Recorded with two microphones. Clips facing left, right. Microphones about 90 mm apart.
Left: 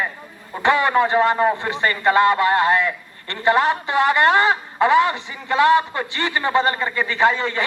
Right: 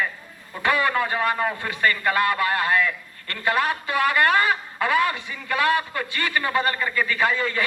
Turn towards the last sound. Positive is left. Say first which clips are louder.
# left 4 dB
turn(degrees=25)  # may be behind; listen again after turning